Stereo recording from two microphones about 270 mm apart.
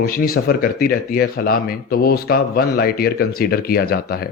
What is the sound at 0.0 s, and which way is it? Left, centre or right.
Speech, left.